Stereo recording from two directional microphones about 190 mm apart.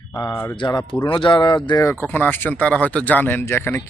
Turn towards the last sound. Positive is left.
turn(degrees=10)  # may be behind; listen again after turning